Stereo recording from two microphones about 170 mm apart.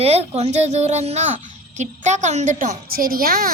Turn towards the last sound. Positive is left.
turn(degrees=-60)  # may be behind; listen again after turning